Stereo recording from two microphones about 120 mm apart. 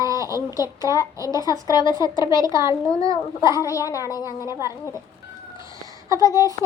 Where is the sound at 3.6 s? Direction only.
30° left (ahead or behind).